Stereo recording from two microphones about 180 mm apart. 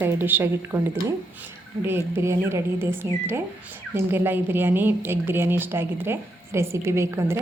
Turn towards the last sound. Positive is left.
turn(degrees=-15)  # may be behind; listen again after turning